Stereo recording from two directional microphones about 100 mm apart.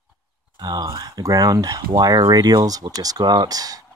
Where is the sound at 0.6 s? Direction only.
40° right (ahead or behind).